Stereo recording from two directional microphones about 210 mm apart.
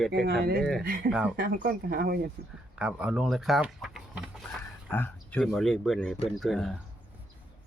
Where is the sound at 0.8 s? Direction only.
45° right (ahead or behind).